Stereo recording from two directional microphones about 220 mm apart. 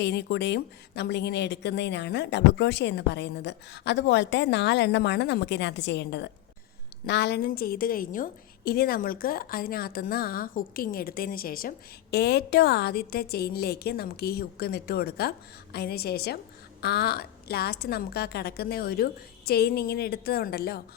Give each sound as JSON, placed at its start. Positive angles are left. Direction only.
{"t": 0.0, "sound": "a woman's voice", "side_deg": 50}